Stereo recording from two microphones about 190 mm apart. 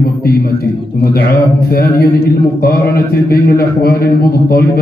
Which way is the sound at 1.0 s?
50° left (ahead or behind).